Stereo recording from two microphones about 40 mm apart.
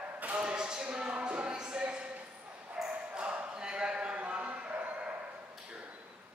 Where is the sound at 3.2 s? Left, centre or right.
Right.